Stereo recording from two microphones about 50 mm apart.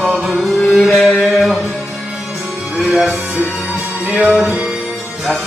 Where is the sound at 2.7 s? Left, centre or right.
Centre.